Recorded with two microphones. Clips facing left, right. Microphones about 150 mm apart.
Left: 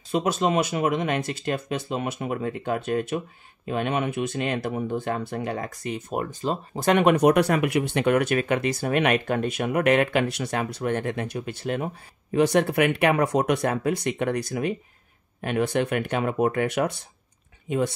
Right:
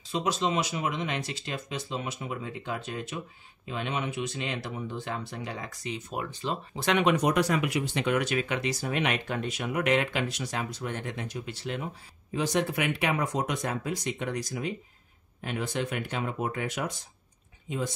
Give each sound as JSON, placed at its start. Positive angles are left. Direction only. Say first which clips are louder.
{"t": 0.1, "sound": "speech", "louder": "left 5 dB", "side_deg": 55}